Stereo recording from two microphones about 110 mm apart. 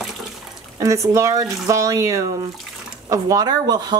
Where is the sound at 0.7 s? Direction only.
30° right (ahead or behind).